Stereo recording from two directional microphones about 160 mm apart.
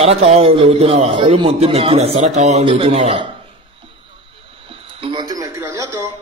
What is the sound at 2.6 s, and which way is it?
Speech, 35° right (ahead or behind).